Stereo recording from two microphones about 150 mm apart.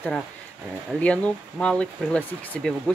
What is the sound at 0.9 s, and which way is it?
Speech, 10° left (ahead or behind).